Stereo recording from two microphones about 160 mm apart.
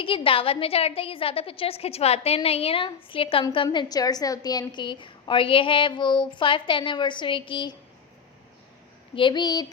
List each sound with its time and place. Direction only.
0.0 s a woman's voice: 35° left (ahead or behind)
9.1 s a woman's voice: 30° left (ahead or behind)